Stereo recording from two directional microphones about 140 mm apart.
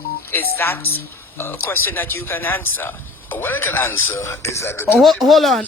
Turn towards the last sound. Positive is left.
turn(degrees=0)  # may be behind; listen again after turning